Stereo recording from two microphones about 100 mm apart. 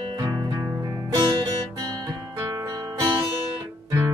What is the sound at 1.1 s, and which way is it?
Music, 50° right (ahead or behind).